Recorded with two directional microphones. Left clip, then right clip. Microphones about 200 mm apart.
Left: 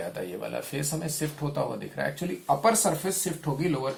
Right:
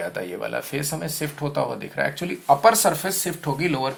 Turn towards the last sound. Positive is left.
turn(degrees=-30)  # may be behind; listen again after turning